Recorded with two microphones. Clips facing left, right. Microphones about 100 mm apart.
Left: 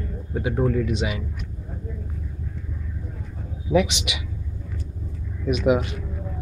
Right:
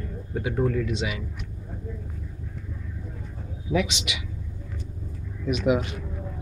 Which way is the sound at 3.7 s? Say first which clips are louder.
Left 5 dB; 35° left (ahead or behind).